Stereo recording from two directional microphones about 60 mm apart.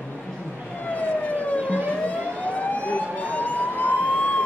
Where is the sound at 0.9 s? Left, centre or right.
Left.